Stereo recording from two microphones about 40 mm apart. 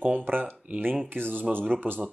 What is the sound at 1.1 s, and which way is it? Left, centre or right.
Speech, right.